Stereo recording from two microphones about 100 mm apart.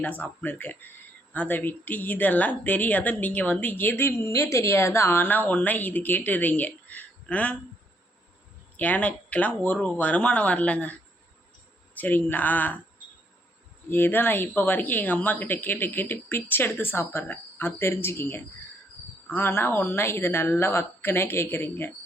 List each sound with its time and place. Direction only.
0.0 s speech: 15° left (ahead or behind)
8.7 s speech: 15° left (ahead or behind)
11.9 s speech: 15° left (ahead or behind)
13.9 s speech: 20° left (ahead or behind)